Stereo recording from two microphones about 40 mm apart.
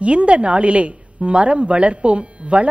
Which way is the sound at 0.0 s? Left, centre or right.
Right.